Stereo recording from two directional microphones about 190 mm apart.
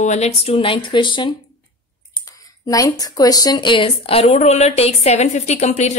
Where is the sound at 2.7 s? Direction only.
20° left (ahead or behind).